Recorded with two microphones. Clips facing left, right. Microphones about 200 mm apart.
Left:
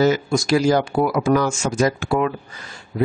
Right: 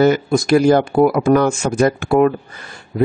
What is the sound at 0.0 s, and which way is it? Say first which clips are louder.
Speech: right 4 dB; 55° right (ahead or behind).